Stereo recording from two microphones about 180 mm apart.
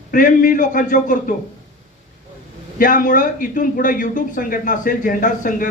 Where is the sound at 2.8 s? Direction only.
50° left (ahead or behind).